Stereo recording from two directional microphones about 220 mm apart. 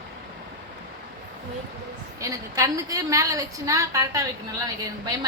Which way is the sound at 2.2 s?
15° right (ahead or behind).